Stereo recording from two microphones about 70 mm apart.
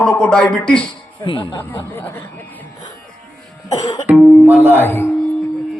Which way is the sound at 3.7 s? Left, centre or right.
Left.